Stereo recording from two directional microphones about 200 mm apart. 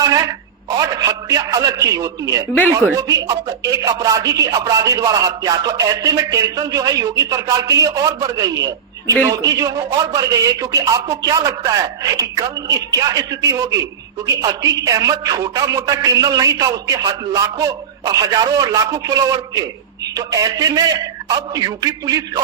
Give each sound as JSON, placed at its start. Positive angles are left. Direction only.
{"t": 0.0, "sound": "telephone", "side_deg": -15}
{"t": 0.8, "sound": "a man's voice", "side_deg": -15}